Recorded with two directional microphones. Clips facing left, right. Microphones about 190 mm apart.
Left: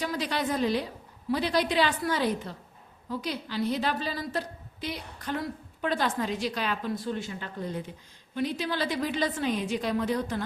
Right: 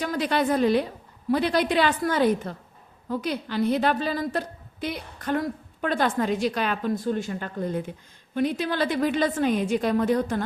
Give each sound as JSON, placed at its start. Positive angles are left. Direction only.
{"t": 0.0, "sound": "a woman's voice", "side_deg": -55}